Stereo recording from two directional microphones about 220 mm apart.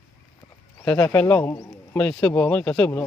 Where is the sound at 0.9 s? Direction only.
10° left (ahead or behind).